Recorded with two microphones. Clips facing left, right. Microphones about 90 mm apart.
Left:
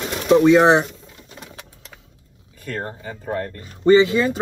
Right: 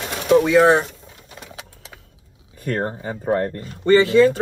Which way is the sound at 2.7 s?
35° right (ahead or behind).